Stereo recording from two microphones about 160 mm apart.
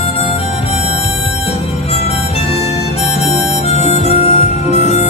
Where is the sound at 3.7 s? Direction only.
40° left (ahead or behind).